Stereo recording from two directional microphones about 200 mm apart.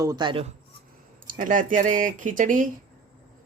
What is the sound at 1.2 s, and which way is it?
Speech, 40° right (ahead or behind).